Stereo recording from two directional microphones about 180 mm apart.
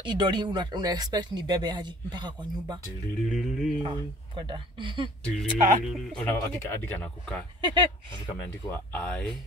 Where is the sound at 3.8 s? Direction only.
25° right (ahead or behind).